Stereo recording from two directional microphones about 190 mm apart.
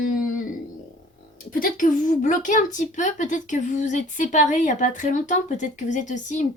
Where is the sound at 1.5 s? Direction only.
45° left (ahead or behind).